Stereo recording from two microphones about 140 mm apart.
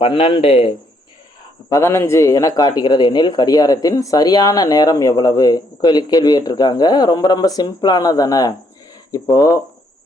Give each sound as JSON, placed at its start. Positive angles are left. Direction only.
{"t": 0.0, "sound": "a man's voice", "side_deg": 40}
{"t": 1.7, "sound": "a man's voice", "side_deg": 15}